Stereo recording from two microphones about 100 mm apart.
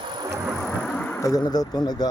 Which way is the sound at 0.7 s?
15° left (ahead or behind).